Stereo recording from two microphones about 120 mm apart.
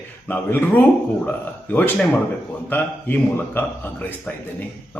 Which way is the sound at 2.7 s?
15° left (ahead or behind).